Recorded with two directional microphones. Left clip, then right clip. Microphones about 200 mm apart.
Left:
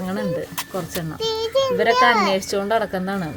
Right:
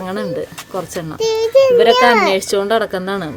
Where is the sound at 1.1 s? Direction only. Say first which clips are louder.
Right 9 dB; 45° right (ahead or behind).